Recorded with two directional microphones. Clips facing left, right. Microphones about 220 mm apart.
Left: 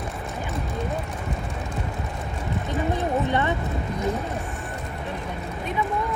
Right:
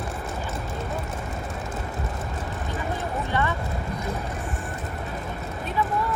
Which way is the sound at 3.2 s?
20° left (ahead or behind).